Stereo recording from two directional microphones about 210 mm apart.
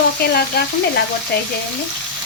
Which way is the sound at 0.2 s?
50° left (ahead or behind).